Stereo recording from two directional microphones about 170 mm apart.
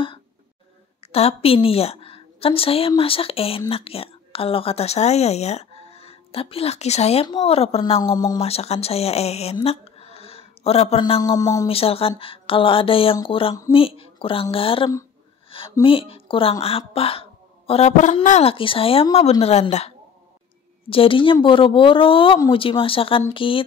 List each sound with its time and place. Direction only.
1.0 s a woman's voice: 35° left (ahead or behind)
8.0 s speech: 20° left (ahead or behind)
8.4 s speech: 35° left (ahead or behind); by 11.6 s 20° left (ahead or behind)
11.6 s a woman's voice: 35° left (ahead or behind)
20.9 s a woman's voice: 30° left (ahead or behind)